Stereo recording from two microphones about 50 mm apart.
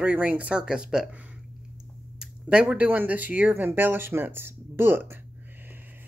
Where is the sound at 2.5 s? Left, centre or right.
Right.